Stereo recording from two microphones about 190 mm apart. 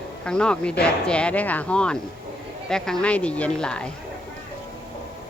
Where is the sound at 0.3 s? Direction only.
5° left (ahead or behind).